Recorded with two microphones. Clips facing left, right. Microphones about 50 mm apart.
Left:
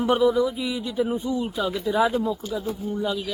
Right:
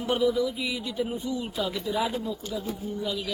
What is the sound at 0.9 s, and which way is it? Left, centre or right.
Speech, centre.